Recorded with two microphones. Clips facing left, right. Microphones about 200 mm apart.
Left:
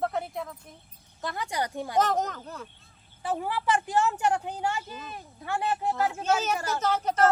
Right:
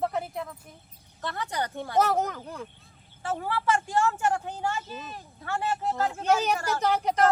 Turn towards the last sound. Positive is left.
turn(degrees=-15)  # may be behind; listen again after turning